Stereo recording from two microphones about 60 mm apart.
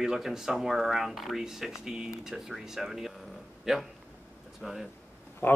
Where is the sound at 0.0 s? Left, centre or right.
Centre.